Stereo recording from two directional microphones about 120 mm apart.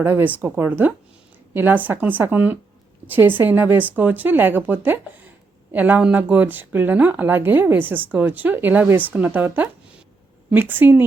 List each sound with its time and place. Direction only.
0.0 s speech: 15° right (ahead or behind)